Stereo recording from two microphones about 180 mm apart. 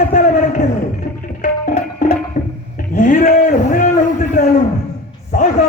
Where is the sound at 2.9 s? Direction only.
45° left (ahead or behind).